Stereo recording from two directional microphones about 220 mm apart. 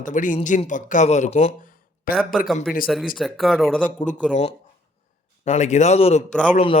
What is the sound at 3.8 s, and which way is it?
Speech, 35° left (ahead or behind).